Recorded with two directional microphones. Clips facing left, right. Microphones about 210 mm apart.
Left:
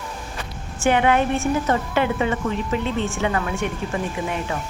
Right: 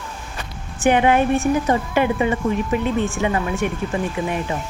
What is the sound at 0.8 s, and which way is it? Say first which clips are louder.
A woman's voice: right 2 dB; 15° right (ahead or behind).